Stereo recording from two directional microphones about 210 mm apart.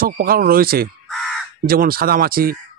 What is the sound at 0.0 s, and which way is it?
Speech, 45° right (ahead or behind).